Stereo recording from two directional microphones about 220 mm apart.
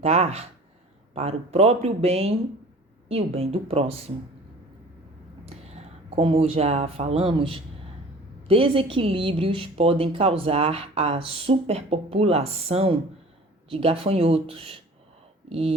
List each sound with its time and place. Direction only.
0.0 s a woman's voice: 30° right (ahead or behind)
5.5 s a woman's voice: 30° right (ahead or behind)